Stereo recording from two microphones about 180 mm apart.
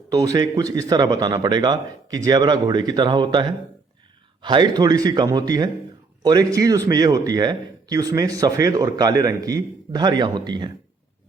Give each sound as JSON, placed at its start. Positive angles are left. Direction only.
{"t": 0.1, "sound": "speech", "side_deg": -20}
{"t": 4.4, "sound": "speech", "side_deg": -25}